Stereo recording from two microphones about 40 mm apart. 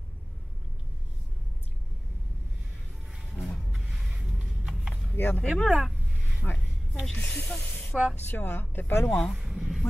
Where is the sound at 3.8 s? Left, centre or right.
Centre.